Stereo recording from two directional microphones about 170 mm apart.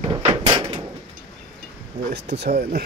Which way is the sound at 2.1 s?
80° right.